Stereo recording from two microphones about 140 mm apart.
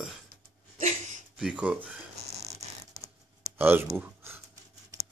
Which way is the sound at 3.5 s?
15° right (ahead or behind).